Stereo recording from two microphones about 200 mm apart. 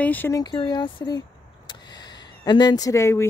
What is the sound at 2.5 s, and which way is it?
Speech, 20° left (ahead or behind).